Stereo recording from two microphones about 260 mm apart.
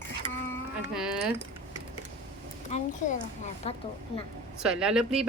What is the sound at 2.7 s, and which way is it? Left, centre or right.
A child's voice, left.